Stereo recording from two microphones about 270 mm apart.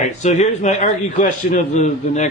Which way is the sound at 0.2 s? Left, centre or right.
Left.